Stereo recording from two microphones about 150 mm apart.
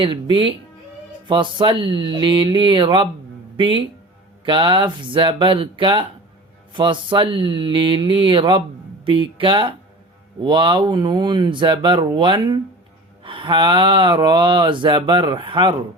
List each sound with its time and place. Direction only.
0.0 s speech: 35° right (ahead or behind)